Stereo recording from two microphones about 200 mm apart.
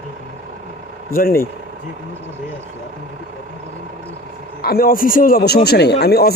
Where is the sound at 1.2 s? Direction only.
45° left (ahead or behind).